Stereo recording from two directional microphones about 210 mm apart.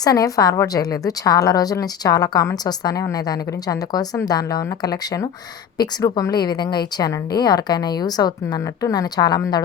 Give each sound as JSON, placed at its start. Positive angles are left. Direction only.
{"t": 0.0, "sound": "a woman's voice", "side_deg": 15}